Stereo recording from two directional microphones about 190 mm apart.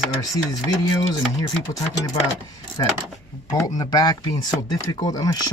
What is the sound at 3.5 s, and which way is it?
Speech, 20° left (ahead or behind).